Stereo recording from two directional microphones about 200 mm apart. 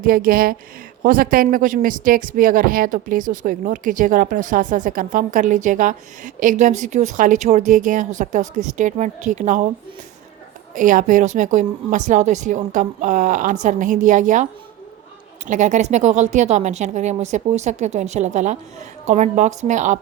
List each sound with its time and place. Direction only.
0.0 s speech: 45° right (ahead or behind)
10.8 s speech: 40° right (ahead or behind)
15.4 s speech: 35° right (ahead or behind)